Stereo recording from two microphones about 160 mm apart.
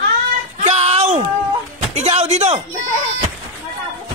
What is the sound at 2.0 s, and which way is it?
Speech, 45° right (ahead or behind).